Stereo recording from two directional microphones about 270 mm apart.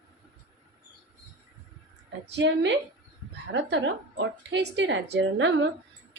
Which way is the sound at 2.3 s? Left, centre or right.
Right.